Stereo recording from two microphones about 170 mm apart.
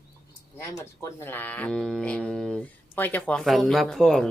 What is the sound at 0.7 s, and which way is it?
Speech, 15° left (ahead or behind).